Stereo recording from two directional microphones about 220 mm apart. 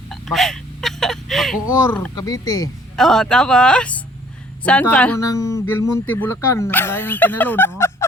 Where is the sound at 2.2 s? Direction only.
15° left (ahead or behind).